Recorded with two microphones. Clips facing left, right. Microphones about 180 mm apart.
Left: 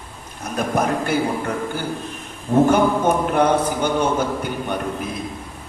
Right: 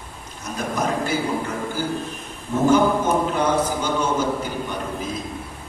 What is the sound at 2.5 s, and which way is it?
A man's voice, 60° left (ahead or behind).